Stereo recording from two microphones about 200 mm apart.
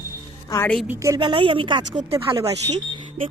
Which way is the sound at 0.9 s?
15° right (ahead or behind).